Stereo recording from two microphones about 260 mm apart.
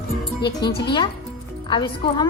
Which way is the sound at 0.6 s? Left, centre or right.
Centre.